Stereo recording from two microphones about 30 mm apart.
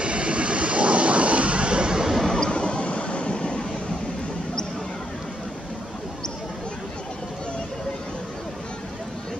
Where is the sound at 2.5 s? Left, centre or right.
Left.